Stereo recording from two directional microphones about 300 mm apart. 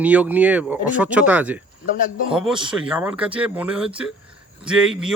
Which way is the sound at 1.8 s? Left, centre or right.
Left.